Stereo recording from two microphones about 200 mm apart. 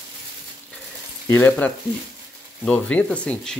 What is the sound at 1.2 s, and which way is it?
Speech, 10° left (ahead or behind).